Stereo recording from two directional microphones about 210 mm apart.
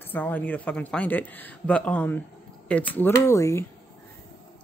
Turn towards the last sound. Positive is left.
turn(degrees=15)  # may be behind; listen again after turning